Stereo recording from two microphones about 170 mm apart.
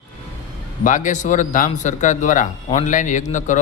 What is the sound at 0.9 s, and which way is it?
A man's voice, 50° left (ahead or behind).